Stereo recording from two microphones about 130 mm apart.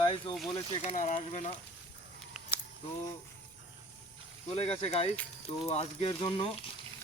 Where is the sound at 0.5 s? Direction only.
55° left (ahead or behind).